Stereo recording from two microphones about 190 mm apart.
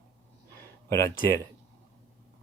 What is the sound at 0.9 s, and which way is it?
Speech, 15° left (ahead or behind).